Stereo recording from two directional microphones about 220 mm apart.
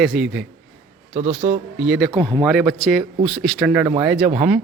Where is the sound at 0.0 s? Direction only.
Centre (ahead or behind).